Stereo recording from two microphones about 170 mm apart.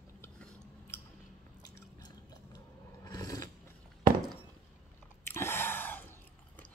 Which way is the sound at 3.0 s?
20° left (ahead or behind).